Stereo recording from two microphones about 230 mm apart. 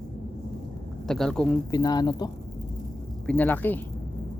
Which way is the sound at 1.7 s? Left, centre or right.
Centre.